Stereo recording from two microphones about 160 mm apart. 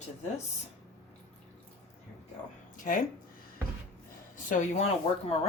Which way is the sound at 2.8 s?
60° left (ahead or behind).